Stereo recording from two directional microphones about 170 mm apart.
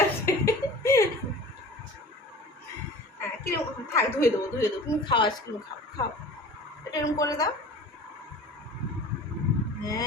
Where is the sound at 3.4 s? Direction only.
15° left (ahead or behind).